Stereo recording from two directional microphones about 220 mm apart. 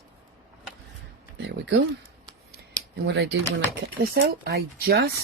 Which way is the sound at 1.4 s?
50° right (ahead or behind).